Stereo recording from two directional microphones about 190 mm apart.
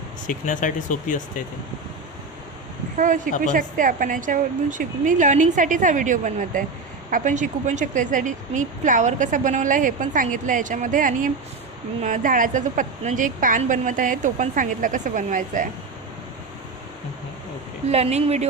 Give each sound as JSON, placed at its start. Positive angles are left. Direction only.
{"t": 0.3, "sound": "speech", "side_deg": 45}
{"t": 3.5, "sound": "speech", "side_deg": -45}
{"t": 17.8, "sound": "speech", "side_deg": -35}